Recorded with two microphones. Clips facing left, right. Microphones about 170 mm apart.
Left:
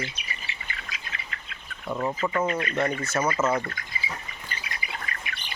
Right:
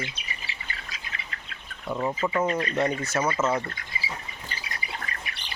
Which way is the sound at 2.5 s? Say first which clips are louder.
Right 1 dB; 35° right (ahead or behind).